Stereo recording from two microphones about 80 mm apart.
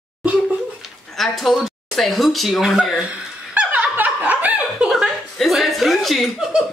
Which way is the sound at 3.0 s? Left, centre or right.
Centre.